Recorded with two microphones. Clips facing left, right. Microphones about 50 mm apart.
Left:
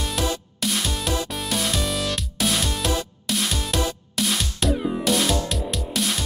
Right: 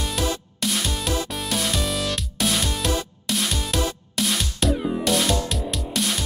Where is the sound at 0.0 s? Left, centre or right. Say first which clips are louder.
Even; centre.